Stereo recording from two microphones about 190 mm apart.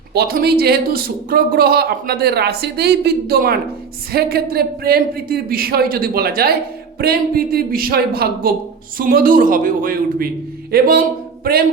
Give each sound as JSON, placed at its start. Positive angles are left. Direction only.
{"t": 0.1, "sound": "speech", "side_deg": -55}